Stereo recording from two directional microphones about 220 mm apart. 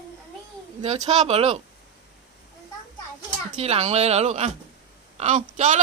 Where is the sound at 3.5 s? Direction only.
30° right (ahead or behind).